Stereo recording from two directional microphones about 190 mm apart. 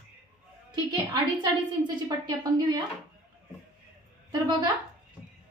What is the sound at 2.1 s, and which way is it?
Speech, 20° right (ahead or behind).